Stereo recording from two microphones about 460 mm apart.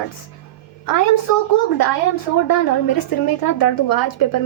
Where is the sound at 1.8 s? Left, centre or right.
Left.